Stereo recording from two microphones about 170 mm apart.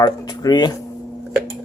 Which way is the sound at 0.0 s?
25° left (ahead or behind).